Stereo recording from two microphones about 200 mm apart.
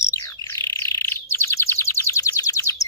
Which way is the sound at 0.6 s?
15° left (ahead or behind).